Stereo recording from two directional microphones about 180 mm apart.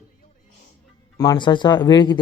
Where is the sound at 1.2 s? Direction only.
25° left (ahead or behind).